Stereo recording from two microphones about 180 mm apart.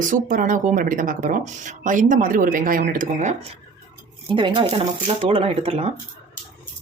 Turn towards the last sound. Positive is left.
turn(degrees=-35)  # may be behind; listen again after turning